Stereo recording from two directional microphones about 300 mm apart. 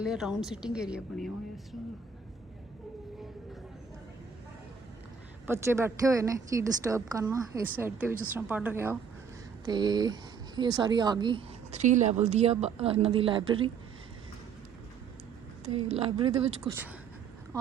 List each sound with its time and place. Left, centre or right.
0.0 s a woman's voice: centre
5.5 s a woman's voice: centre
15.7 s speech: centre